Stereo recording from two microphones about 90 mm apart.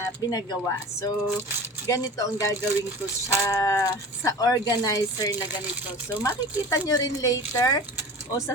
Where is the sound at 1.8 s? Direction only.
40° left (ahead or behind).